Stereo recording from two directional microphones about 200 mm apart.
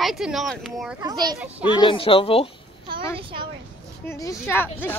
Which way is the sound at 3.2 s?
25° right (ahead or behind).